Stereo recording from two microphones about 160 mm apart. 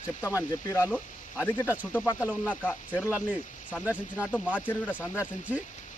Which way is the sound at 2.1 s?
10° left (ahead or behind).